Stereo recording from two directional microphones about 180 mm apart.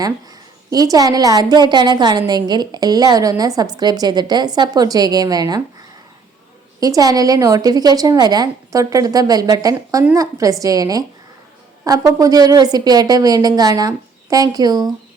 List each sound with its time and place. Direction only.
0.7 s a woman's voice: 20° right (ahead or behind)
6.7 s a woman's voice: 20° right (ahead or behind)